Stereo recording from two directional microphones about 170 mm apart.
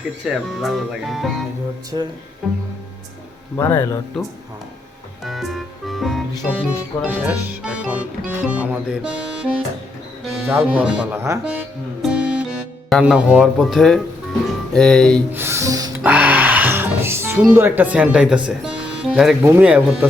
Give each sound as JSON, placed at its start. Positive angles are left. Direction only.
{"t": 0.5, "sound": "speech", "side_deg": 0}
{"t": 1.9, "sound": "speech", "side_deg": -25}
{"t": 2.4, "sound": "speech", "side_deg": 0}
{"t": 3.6, "sound": "speech", "side_deg": 20}
{"t": 5.2, "sound": "music", "side_deg": 0}
{"t": 8.3, "sound": "speech", "side_deg": -10}
{"t": 12.0, "sound": "music", "side_deg": -5}
{"t": 14.8, "sound": "speech", "side_deg": 0}
{"t": 15.3, "sound": "music", "side_deg": -15}
{"t": 16.0, "sound": "music", "side_deg": -10}
{"t": 17.5, "sound": "speech", "side_deg": -10}